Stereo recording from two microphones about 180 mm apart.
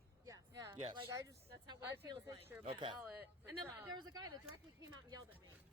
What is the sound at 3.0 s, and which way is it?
Speech, 5° right (ahead or behind).